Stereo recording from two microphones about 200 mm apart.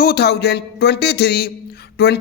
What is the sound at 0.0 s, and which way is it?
A man's voice, 50° left (ahead or behind).